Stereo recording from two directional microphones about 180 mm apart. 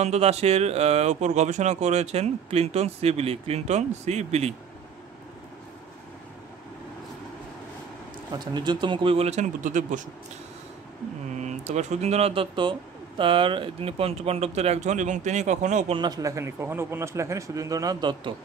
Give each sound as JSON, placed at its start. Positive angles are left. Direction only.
{"t": 0.0, "sound": "speech", "side_deg": -35}
{"t": 8.5, "sound": "speech", "side_deg": -25}
{"t": 11.4, "sound": "speech", "side_deg": -40}
{"t": 16.0, "sound": "speech", "side_deg": -20}